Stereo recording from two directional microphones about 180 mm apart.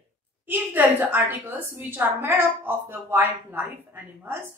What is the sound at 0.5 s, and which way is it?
A woman's voice, 10° right (ahead or behind).